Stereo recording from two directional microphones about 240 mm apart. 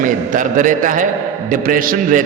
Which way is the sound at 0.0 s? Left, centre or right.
Right.